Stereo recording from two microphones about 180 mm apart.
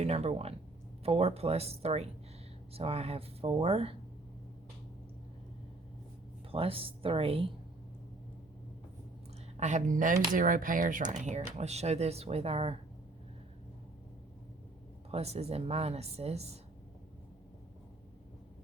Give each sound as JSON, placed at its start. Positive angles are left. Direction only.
{"t": 0.0, "sound": "speech", "side_deg": -35}
{"t": 6.5, "sound": "speech", "side_deg": -30}
{"t": 9.6, "sound": "speech", "side_deg": -40}
{"t": 15.1, "sound": "speech", "side_deg": -35}